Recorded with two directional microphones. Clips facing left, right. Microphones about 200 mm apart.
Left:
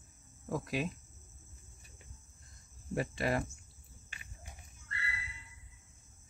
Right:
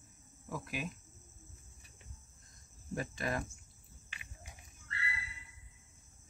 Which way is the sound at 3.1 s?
30° left (ahead or behind).